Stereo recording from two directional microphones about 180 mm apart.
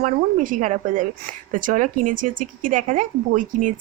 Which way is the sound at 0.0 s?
45° right (ahead or behind).